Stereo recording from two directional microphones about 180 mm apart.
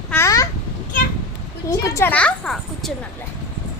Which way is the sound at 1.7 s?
15° left (ahead or behind).